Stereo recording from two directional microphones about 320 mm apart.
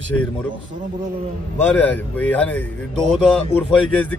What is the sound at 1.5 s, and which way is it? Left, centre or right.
Speech, centre.